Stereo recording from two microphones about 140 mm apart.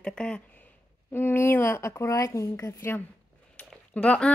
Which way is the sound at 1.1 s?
15° left (ahead or behind).